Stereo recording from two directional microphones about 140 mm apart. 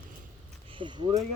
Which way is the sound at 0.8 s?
35° right (ahead or behind).